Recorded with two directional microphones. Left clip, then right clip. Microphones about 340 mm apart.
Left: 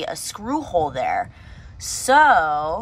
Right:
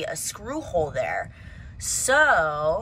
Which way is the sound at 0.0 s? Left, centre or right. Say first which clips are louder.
Left 3 dB; centre.